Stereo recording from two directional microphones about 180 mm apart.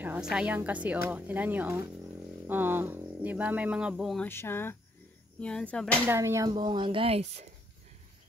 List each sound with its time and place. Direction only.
0.0 s speech: 5° right (ahead or behind)
4.3 s speech: 15° left (ahead or behind)
6.0 s speech: 15° right (ahead or behind)
6.5 s speech: 25° right (ahead or behind)